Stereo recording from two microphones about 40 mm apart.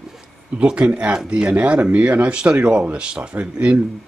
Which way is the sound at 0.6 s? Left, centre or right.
Right.